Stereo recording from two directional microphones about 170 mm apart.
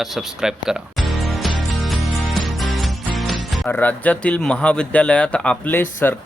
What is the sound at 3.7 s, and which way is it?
Speech, 10° left (ahead or behind).